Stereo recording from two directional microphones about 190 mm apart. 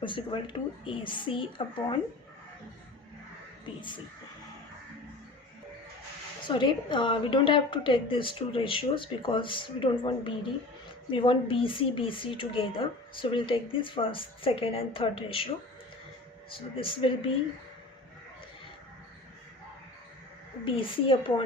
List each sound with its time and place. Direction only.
0.0 s speech: 25° left (ahead or behind)
3.8 s speech: 25° left (ahead or behind)
6.5 s speech: 25° left (ahead or behind)
16.6 s speech: 30° left (ahead or behind)
20.7 s speech: 25° left (ahead or behind)